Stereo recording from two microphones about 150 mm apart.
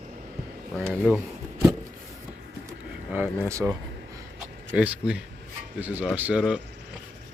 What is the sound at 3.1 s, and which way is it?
Speech, 20° right (ahead or behind).